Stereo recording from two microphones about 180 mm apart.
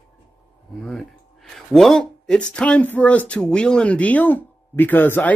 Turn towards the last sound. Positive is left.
turn(degrees=10)  # may be behind; listen again after turning